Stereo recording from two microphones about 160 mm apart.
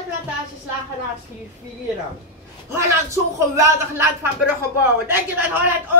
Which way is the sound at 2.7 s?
20° right (ahead or behind).